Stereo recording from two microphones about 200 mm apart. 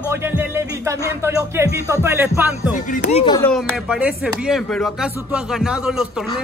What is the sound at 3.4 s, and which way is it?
Speech, 5° left (ahead or behind).